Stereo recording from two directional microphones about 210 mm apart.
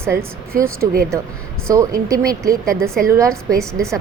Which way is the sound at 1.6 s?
15° right (ahead or behind).